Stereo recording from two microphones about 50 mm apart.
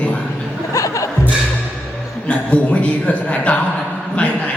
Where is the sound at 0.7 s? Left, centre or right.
Left.